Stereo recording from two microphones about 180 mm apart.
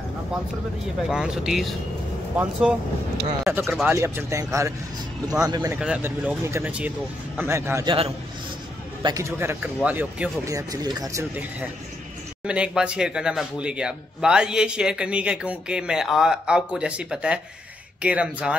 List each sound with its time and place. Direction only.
1.0 s speech: 5° right (ahead or behind); by 5.8 s 20° right (ahead or behind)
5.8 s speech: 5° right (ahead or behind)
9.0 s speech: 15° right (ahead or behind)
10.4 s speech: 20° right (ahead or behind)